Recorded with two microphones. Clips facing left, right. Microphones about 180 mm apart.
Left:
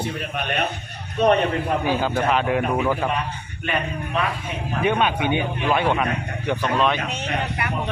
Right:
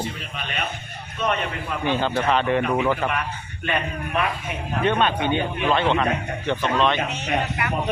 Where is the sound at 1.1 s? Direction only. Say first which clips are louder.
Left 7 dB; 35° left (ahead or behind).